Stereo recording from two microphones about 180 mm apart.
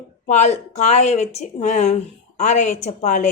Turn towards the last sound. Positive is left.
turn(degrees=45)  # may be behind; listen again after turning